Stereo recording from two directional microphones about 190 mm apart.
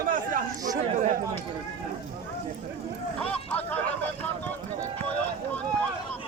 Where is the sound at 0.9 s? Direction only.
40° right (ahead or behind).